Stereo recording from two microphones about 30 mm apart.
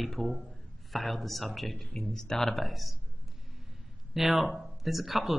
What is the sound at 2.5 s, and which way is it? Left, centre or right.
Speech, centre.